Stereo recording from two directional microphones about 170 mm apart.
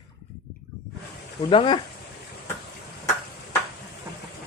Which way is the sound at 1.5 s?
30° left (ahead or behind).